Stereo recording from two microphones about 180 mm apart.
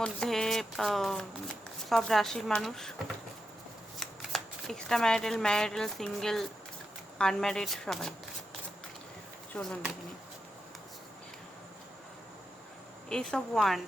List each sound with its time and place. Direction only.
0.0 s a sound: 5° left (ahead or behind)
1.9 s speech: centre (ahead or behind)
4.0 s speech: centre (ahead or behind)
9.6 s speech: centre (ahead or behind)
13.1 s speech: 5° left (ahead or behind)